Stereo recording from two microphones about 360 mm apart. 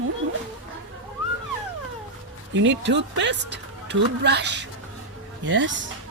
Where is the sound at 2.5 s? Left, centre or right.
Right.